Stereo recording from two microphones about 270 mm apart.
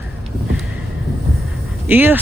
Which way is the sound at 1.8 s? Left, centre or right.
Centre.